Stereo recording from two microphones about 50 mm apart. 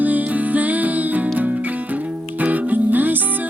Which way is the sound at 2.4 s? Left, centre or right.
Right.